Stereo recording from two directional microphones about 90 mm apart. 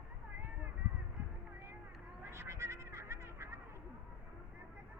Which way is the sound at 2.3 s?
30° right (ahead or behind).